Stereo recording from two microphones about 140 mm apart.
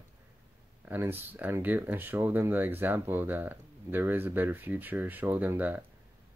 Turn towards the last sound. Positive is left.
turn(degrees=-15)  # may be behind; listen again after turning